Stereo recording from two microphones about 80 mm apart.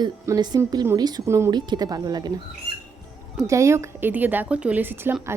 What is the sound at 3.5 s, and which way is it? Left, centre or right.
A woman's voice, right.